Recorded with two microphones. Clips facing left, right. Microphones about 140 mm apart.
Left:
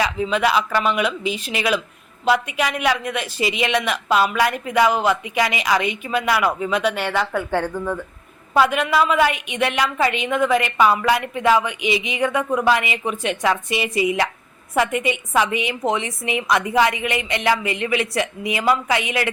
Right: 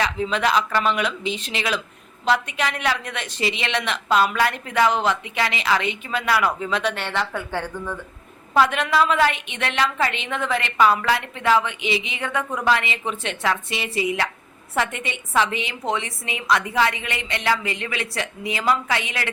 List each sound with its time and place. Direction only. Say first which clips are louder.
0.0 s a woman's voice: left 2 dB; 5° left (ahead or behind)